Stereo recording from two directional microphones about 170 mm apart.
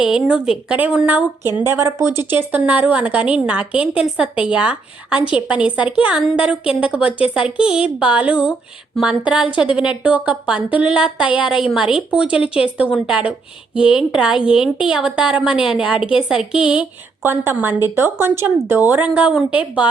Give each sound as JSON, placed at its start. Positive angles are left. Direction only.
{"t": 0.1, "sound": "a woman's voice", "side_deg": -5}
{"t": 12.4, "sound": "speech", "side_deg": 35}
{"t": 12.7, "sound": "a woman's voice", "side_deg": -5}